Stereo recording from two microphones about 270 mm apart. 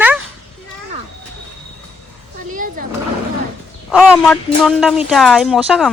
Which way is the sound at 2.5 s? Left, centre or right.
Right.